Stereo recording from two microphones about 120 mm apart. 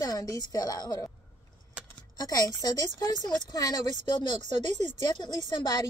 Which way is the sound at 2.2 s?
30° left (ahead or behind).